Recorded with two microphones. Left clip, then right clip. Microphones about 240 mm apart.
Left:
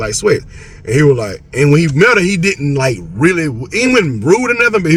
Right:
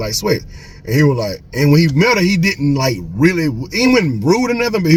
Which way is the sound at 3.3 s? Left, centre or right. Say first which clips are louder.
Left 3 dB; centre.